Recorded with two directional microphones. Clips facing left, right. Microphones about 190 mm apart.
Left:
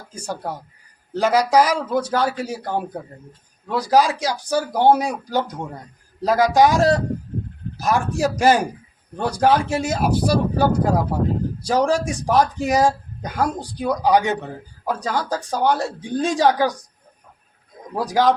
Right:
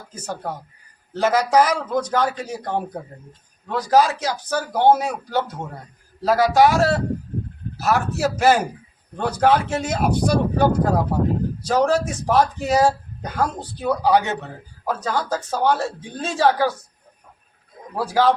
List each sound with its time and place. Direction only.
0.1 s a man's voice: 10° left (ahead or behind)
17.9 s a man's voice: 15° left (ahead or behind)